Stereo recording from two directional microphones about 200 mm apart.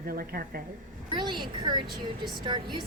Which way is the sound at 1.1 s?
25° right (ahead or behind).